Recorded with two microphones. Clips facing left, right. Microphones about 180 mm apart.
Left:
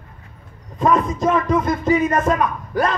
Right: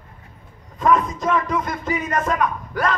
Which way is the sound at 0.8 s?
25° left (ahead or behind).